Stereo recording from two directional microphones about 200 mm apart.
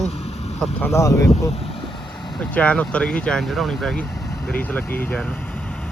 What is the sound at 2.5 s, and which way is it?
Speech, 5° left (ahead or behind).